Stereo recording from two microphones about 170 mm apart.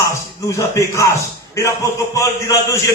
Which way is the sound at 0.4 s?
20° left (ahead or behind).